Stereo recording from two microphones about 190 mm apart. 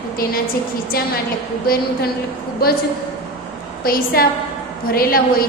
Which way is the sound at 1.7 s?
50° left (ahead or behind).